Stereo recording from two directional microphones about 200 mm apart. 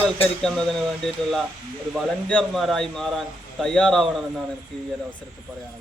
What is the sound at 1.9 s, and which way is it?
A man's voice, 5° left (ahead or behind).